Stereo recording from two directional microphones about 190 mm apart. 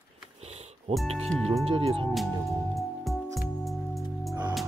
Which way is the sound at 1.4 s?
30° right (ahead or behind).